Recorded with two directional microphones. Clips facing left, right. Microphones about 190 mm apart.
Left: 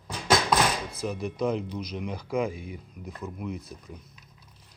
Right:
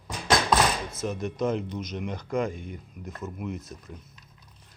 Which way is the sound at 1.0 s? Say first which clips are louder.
Even; centre (ahead or behind).